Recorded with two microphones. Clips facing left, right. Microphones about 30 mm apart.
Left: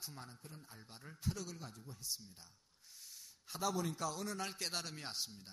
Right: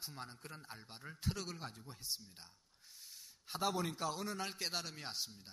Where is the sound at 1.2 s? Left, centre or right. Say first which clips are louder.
Right 1 dB; right.